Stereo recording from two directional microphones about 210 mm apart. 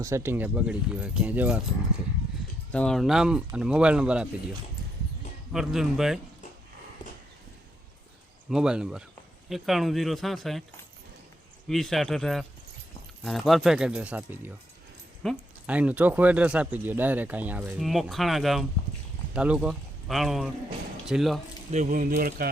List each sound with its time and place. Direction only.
0.0 s speech: 10° right (ahead or behind)
2.7 s speech: 5° left (ahead or behind)
8.4 s speech: 5° right (ahead or behind)
11.7 s speech: centre (ahead or behind)
21.7 s speech: 35° right (ahead or behind)